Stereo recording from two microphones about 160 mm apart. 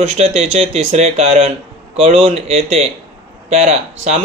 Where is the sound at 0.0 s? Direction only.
40° right (ahead or behind).